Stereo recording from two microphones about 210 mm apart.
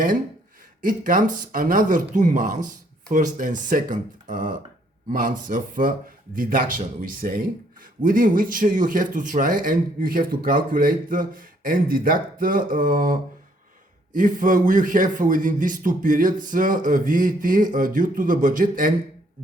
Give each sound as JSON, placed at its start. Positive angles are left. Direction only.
{"t": 0.8, "sound": "speech", "side_deg": -40}